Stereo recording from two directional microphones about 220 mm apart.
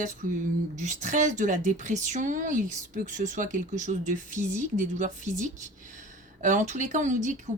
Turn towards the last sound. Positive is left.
turn(degrees=-35)  # may be behind; listen again after turning